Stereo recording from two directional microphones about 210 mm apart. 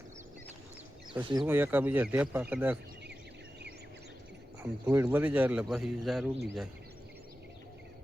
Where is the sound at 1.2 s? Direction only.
20° right (ahead or behind).